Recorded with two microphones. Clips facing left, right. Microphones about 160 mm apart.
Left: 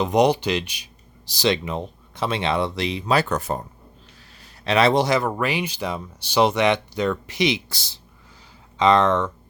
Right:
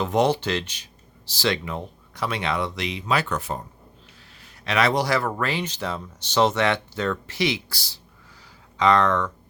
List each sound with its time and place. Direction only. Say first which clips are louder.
0.0 s speech: left 3 dB; 15° left (ahead or behind); by 3.6 s 45° left (ahead or behind)
4.4 s speech: left 4 dB; 30° left (ahead or behind)